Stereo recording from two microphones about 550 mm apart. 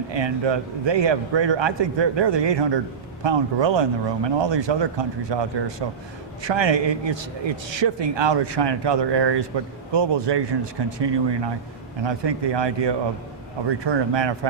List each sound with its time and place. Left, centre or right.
0.1 s a man's voice: right